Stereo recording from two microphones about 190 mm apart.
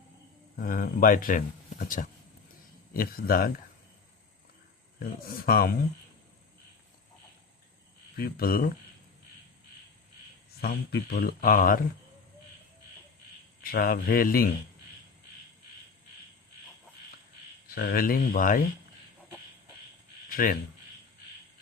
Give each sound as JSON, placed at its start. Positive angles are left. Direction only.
{"t": 0.5, "sound": "speech", "side_deg": 45}
{"t": 5.5, "sound": "speech", "side_deg": 50}
{"t": 8.1, "sound": "speech", "side_deg": 50}
{"t": 10.6, "sound": "speech", "side_deg": 55}
{"t": 13.6, "sound": "speech", "side_deg": 50}
{"t": 17.7, "sound": "speech", "side_deg": 50}
{"t": 20.3, "sound": "speech", "side_deg": 45}